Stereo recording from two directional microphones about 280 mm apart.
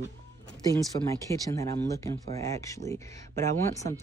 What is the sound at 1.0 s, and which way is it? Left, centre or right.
Speech, centre.